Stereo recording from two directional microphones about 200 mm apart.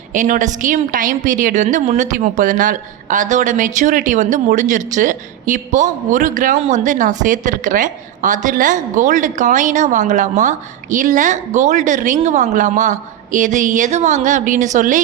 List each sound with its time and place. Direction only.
0.1 s a woman's voice: 40° right (ahead or behind)